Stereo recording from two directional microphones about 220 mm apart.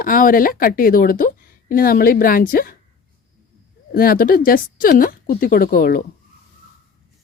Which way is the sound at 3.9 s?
40° left (ahead or behind).